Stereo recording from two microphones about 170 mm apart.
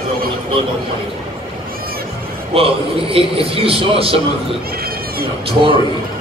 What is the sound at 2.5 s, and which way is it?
A man's voice, 35° right (ahead or behind).